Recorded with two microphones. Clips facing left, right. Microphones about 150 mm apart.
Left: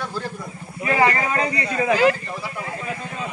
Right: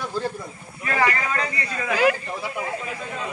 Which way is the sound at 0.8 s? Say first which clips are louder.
Left 4 dB; 20° left (ahead or behind).